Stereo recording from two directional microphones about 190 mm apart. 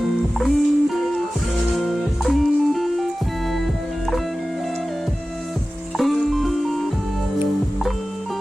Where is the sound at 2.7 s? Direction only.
Centre (ahead or behind).